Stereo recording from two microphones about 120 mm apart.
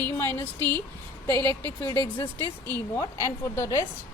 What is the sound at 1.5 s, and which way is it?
A woman's voice, 15° left (ahead or behind).